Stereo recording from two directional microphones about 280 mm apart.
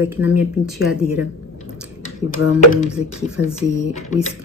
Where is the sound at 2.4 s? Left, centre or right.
Left.